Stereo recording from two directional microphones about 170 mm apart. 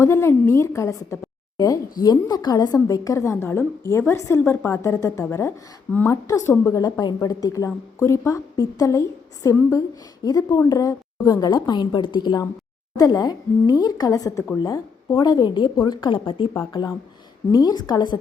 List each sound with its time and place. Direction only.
0.0 s a woman's voice: 15° left (ahead or behind)
17.5 s a woman's voice: 25° left (ahead or behind)